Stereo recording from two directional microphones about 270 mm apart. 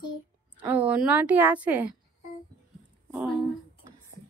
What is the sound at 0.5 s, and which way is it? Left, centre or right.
Speech, centre.